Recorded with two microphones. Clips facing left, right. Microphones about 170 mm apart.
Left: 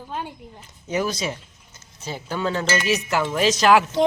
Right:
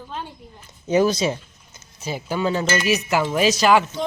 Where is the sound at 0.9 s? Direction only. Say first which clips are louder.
Right 6 dB; 30° right (ahead or behind).